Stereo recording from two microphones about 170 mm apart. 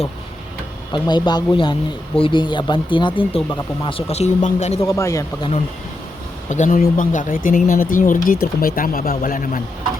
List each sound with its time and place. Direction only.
0.9 s speech: 25° left (ahead or behind)
4.8 s speech: 15° left (ahead or behind)
6.5 s speech: 45° left (ahead or behind)